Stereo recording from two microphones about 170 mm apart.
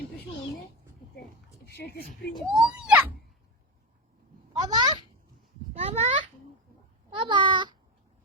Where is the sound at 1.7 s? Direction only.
75° left (ahead or behind).